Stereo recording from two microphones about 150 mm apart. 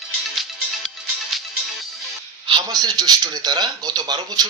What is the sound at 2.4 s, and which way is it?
Speech, 30° right (ahead or behind).